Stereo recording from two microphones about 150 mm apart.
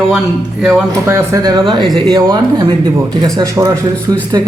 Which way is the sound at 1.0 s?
20° right (ahead or behind).